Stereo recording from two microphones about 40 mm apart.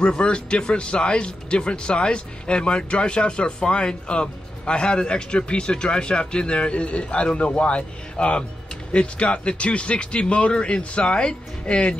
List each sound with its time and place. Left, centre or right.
0.0 s speech: left